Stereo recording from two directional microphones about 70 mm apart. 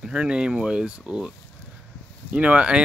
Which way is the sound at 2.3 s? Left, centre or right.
Centre.